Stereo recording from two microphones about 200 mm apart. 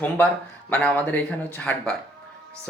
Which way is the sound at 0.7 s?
5° left (ahead or behind).